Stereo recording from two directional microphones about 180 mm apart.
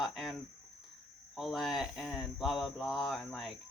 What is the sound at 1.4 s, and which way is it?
Speech, centre (ahead or behind).